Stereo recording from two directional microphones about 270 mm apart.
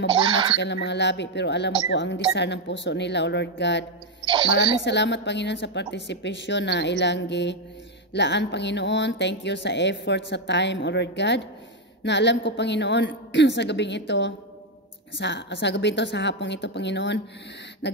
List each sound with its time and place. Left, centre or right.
0.1 s speech: centre
0.6 s speech: left
4.2 s a sound: centre
4.8 s speech: left